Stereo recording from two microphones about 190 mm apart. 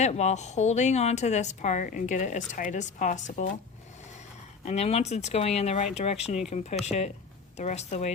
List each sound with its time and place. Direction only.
0.0 s a woman's voice: 35° left (ahead or behind)
4.6 s a woman's voice: 35° left (ahead or behind)